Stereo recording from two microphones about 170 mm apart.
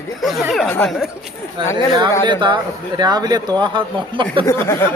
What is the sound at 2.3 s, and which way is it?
Speech, 30° right (ahead or behind).